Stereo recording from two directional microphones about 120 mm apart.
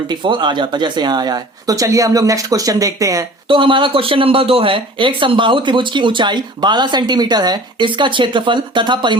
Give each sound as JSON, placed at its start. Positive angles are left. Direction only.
{"t": 0.1, "sound": "speech", "side_deg": -40}
{"t": 3.5, "sound": "speech", "side_deg": -45}